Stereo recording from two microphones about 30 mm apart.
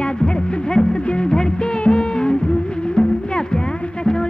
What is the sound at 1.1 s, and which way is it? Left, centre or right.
Music, left.